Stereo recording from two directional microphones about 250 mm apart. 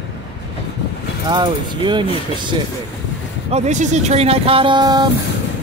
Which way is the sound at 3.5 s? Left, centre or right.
Right.